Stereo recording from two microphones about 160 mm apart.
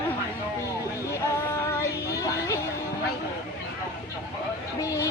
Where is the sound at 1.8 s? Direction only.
20° left (ahead or behind).